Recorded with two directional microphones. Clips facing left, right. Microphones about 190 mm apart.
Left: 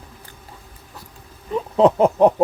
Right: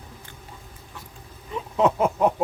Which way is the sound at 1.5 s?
35° left (ahead or behind).